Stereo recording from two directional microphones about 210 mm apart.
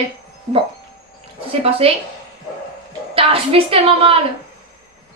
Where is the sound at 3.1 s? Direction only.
25° right (ahead or behind).